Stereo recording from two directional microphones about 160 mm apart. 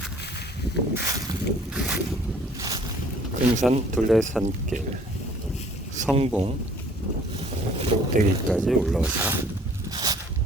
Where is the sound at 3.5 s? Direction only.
50° right (ahead or behind).